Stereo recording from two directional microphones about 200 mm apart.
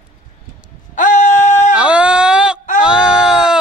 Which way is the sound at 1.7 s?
5° right (ahead or behind).